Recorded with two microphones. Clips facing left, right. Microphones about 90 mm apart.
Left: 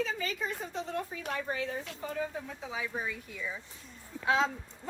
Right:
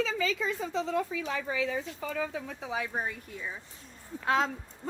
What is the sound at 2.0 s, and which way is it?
A woman's voice, 90° right.